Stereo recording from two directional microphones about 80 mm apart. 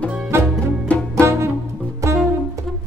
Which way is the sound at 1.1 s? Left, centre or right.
Right.